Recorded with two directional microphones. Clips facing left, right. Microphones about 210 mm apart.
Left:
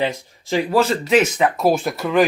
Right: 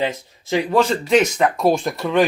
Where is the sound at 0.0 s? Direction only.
15° left (ahead or behind).